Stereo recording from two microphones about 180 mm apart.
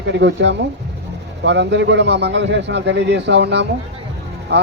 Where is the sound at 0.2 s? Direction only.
75° right (ahead or behind).